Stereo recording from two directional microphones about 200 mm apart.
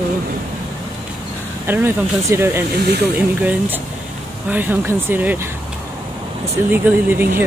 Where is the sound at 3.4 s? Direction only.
10° right (ahead or behind).